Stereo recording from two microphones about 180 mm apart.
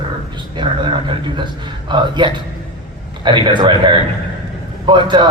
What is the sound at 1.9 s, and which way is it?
A man's voice, 25° right (ahead or behind).